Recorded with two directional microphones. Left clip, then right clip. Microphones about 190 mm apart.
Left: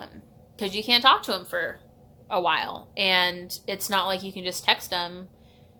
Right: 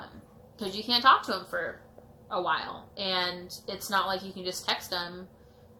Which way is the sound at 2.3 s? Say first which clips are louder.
Left 6 dB; 40° left (ahead or behind).